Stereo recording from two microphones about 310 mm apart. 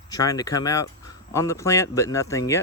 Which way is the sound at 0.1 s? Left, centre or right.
Centre.